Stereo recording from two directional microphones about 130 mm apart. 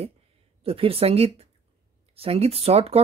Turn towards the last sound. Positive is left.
turn(degrees=-50)  # may be behind; listen again after turning